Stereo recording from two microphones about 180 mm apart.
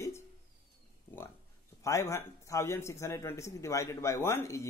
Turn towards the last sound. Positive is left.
turn(degrees=15)  # may be behind; listen again after turning